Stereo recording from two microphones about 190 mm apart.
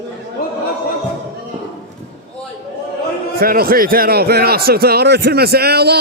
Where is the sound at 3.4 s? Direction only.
50° right (ahead or behind).